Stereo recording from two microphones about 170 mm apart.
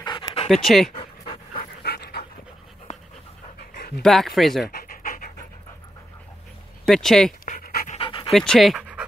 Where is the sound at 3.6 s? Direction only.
65° left (ahead or behind).